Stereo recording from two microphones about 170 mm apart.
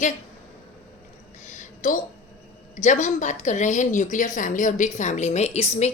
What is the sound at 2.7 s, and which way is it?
A woman's voice, 45° left (ahead or behind).